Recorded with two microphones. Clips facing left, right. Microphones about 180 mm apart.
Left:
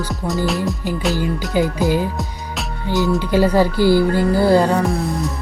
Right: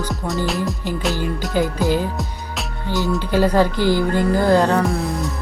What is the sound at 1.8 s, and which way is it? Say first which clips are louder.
Speech: left 1 dB; 15° left (ahead or behind).